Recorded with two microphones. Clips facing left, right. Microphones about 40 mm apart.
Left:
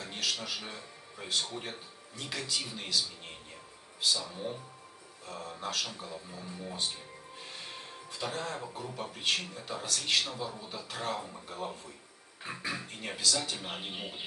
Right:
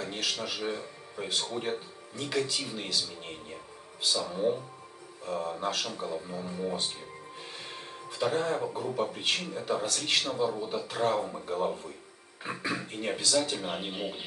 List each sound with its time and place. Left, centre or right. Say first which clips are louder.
0.0 s a man's voice: right 3 dB; centre
7.7 s music: right 3 dB; centre
8.7 s a man's voice: right 8 dB; centre